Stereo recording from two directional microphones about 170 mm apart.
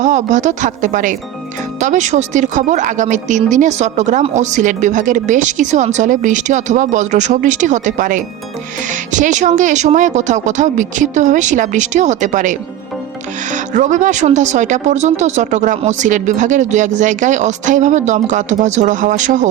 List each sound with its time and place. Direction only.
0.0 s a woman's voice: 45° right (ahead or behind)